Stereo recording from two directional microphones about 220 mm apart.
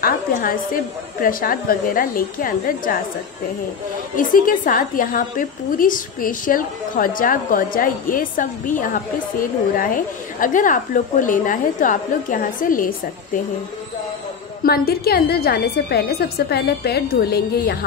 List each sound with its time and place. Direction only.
0.0 s a woman's voice: 40° left (ahead or behind)
4.2 s a woman's voice: 40° left (ahead or behind)
14.6 s a woman's voice: 45° left (ahead or behind)